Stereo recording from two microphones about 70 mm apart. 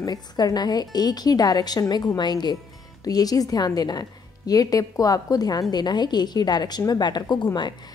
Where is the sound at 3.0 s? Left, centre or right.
Left.